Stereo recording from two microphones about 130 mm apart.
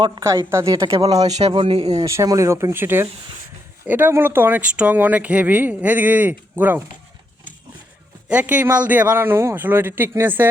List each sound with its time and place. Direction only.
0.5 s speech: 25° right (ahead or behind)
1.3 s speech: 55° right (ahead or behind)
1.9 s speech: 25° right (ahead or behind)
8.3 s speech: 10° right (ahead or behind)